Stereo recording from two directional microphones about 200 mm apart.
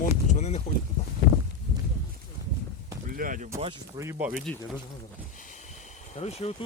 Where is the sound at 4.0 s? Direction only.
10° right (ahead or behind).